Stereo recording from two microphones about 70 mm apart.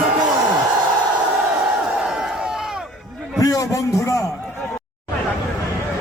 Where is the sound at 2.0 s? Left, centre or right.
Centre.